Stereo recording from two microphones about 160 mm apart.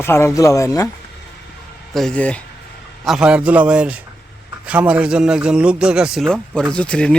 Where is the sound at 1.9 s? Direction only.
5° left (ahead or behind).